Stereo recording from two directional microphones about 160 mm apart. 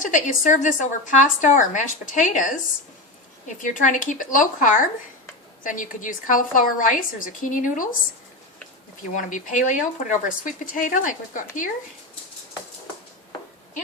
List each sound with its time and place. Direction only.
0.0 s a woman's voice: 50° left (ahead or behind)
9.1 s speech: 55° left (ahead or behind)